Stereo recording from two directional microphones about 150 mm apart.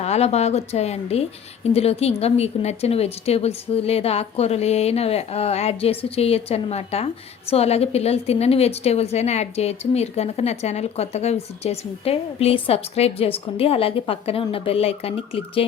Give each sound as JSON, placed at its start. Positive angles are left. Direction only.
{"t": 0.0, "sound": "a woman's voice", "side_deg": 45}